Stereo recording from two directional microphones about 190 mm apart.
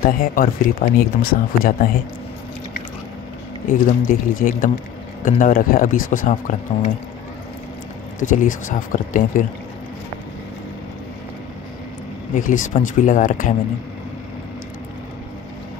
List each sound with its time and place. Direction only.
0.0 s speech: 45° left (ahead or behind)
3.7 s speech: 45° left (ahead or behind)
8.2 s speech: 40° left (ahead or behind)
12.4 s speech: 40° left (ahead or behind)